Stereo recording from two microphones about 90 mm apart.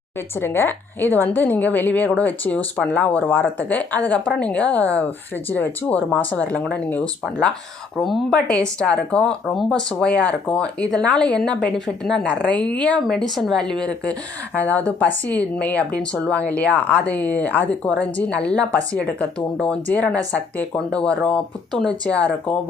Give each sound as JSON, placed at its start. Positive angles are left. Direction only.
{"t": 0.3, "sound": "a woman's voice", "side_deg": 25}